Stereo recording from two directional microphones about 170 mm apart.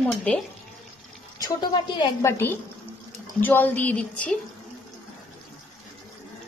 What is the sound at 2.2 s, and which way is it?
Speech, 15° left (ahead or behind).